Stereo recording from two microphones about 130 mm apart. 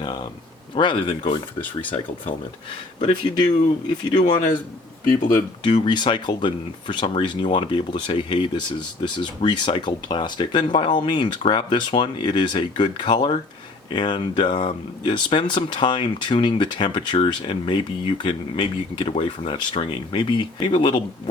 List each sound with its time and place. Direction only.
0.8 s speech: 35° left (ahead or behind)
3.0 s speech: 40° left (ahead or behind)
5.8 s speech: 35° left (ahead or behind)